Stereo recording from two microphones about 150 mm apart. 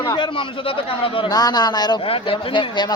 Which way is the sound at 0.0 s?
35° left (ahead or behind).